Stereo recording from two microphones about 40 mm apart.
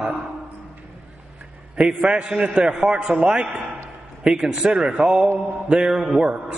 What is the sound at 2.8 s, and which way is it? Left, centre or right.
A man's voice, centre.